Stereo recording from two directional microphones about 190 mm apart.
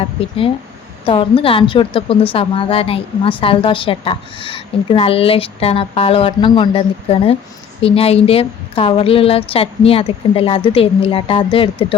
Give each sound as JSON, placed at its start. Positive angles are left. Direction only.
{"t": 0.0, "sound": "a woman's voice", "side_deg": 30}